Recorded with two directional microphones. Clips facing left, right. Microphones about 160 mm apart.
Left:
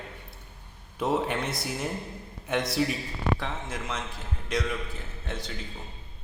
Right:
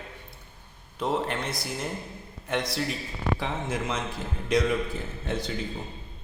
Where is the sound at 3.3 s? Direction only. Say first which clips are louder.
Right 4 dB; 5° right (ahead or behind).